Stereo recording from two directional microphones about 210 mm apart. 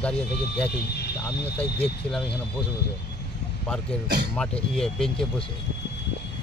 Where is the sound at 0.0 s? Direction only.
5° left (ahead or behind).